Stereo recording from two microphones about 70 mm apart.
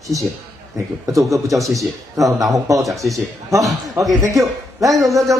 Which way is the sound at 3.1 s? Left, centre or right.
Right.